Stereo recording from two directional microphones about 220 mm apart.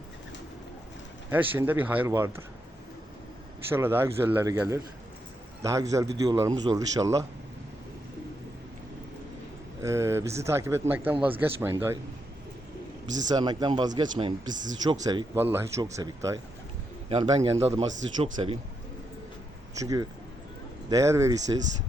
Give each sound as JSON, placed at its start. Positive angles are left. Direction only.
{"t": 1.3, "sound": "a man's voice", "side_deg": -10}
{"t": 3.7, "sound": "a man's voice", "side_deg": -10}
{"t": 9.8, "sound": "a man's voice", "side_deg": -15}
{"t": 13.2, "sound": "a man's voice", "side_deg": -20}
{"t": 14.5, "sound": "speech", "side_deg": -35}
{"t": 15.0, "sound": "a man's voice", "side_deg": -20}
{"t": 17.1, "sound": "a man's voice", "side_deg": -25}
{"t": 19.8, "sound": "a man's voice", "side_deg": -15}